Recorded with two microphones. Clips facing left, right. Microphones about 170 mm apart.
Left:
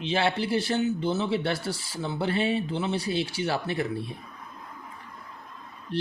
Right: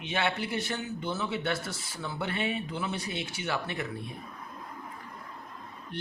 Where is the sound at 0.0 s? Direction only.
30° left (ahead or behind).